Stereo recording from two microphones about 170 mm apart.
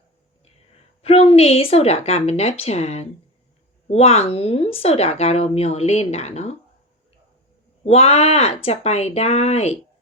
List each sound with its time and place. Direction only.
1.0 s a woman's voice: 35° left (ahead or behind)
7.9 s a woman's voice: 35° left (ahead or behind)